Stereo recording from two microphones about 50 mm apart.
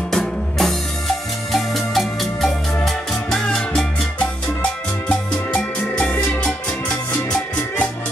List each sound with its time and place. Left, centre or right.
0.1 s music: centre
5.5 s music: left